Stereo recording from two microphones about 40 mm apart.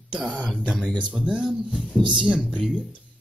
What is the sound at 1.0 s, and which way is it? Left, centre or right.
Speech, right.